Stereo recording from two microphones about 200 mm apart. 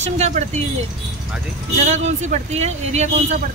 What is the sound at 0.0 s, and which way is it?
Speech, 35° right (ahead or behind).